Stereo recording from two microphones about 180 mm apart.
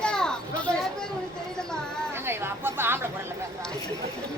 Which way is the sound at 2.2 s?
15° right (ahead or behind).